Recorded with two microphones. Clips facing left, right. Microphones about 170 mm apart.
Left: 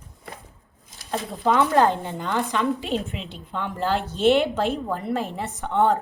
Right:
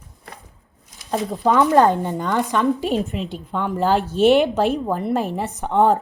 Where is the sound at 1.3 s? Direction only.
40° right (ahead or behind).